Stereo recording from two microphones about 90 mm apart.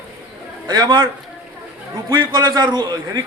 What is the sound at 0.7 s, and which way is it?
Speech, 55° right (ahead or behind).